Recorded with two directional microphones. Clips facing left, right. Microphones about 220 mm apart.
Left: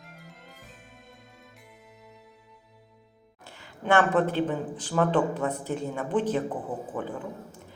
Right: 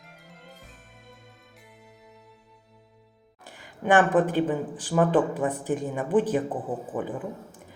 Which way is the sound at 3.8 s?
15° right (ahead or behind).